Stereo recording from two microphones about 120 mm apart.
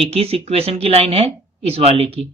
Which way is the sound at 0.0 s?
55° right (ahead or behind).